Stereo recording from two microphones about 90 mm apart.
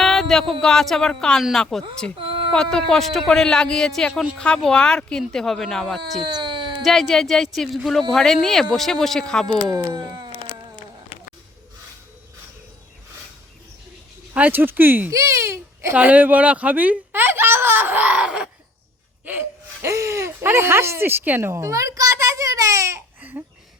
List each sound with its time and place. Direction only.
0.0 s a sound: 5° left (ahead or behind)
0.6 s speech: 5° left (ahead or behind)
2.2 s a sound: 80° right
2.5 s speech: 10° left (ahead or behind)
4.1 s speech: 10° right (ahead or behind)
4.4 s speech: 10° left (ahead or behind)
6.2 s a sound: 60° right (ahead or behind)
6.8 s speech: centre (ahead or behind)
9.6 s speech: 40° right (ahead or behind)
14.3 s speech: 20° right (ahead or behind)
15.1 s speech: 35° right (ahead or behind)
16.0 s speech: 15° right (ahead or behind)
19.2 s speech: 20° right (ahead or behind)
23.2 s a sound: 20° right (ahead or behind)